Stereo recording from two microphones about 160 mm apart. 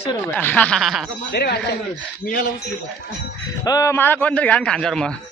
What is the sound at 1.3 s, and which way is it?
Speech, 85° left.